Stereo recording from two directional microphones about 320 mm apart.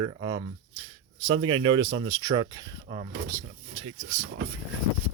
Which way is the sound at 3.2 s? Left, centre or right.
Right.